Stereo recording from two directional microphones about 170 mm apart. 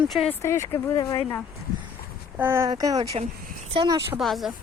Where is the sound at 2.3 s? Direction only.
15° right (ahead or behind).